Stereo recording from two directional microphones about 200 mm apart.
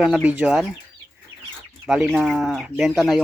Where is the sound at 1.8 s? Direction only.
Centre (ahead or behind).